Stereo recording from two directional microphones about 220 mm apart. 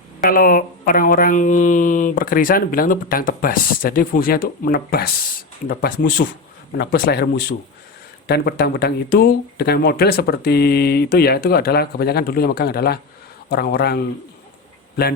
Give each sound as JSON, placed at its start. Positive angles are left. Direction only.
{"t": 0.2, "sound": "speech", "side_deg": 40}